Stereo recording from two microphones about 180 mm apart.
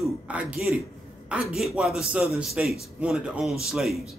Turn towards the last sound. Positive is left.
turn(degrees=0)  # may be behind; listen again after turning